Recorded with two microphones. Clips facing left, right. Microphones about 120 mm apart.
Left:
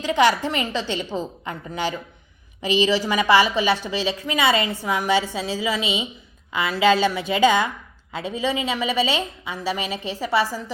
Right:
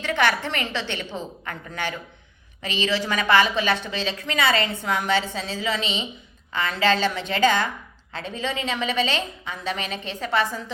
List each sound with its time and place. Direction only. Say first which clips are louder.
0.0 s a woman's voice: left 4 dB; 10° left (ahead or behind)